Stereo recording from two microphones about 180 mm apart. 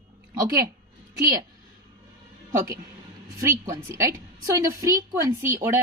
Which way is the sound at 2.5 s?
15° right (ahead or behind).